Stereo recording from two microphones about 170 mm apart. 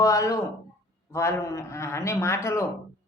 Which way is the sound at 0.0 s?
20° left (ahead or behind).